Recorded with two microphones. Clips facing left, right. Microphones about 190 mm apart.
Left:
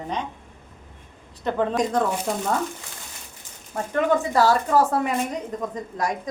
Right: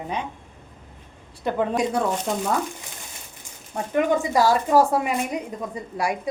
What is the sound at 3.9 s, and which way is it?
A woman's voice, 15° right (ahead or behind).